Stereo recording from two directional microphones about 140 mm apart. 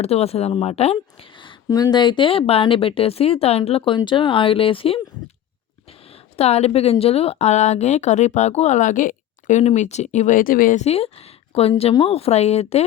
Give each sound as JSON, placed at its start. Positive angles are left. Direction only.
{"t": 0.0, "sound": "speech", "side_deg": 45}
{"t": 6.3, "sound": "speech", "side_deg": 50}
{"t": 10.8, "sound": "speech", "side_deg": 45}